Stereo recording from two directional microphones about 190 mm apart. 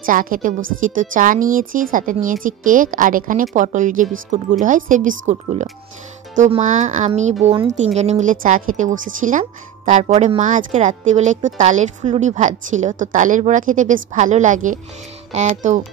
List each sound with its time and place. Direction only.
0.0 s a woman's voice: 45° right (ahead or behind)